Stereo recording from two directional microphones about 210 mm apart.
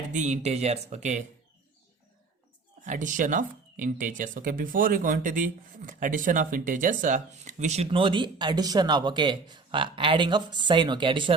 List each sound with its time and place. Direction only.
0.1 s speech: 35° right (ahead or behind)
2.8 s speech: 35° right (ahead or behind)